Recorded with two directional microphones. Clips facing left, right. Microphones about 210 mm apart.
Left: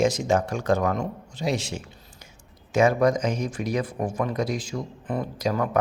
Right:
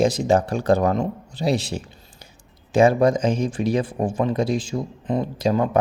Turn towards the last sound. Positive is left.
turn(degrees=-25)  # may be behind; listen again after turning